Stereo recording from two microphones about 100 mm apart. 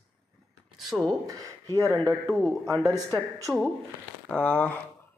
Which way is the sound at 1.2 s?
35° right (ahead or behind).